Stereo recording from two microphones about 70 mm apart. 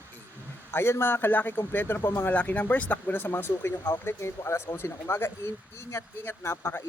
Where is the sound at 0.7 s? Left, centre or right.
Left.